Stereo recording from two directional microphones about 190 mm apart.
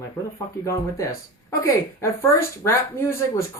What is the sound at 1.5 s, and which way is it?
Speech, 15° left (ahead or behind).